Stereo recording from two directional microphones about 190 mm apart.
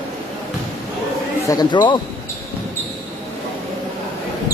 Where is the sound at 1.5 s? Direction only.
20° left (ahead or behind).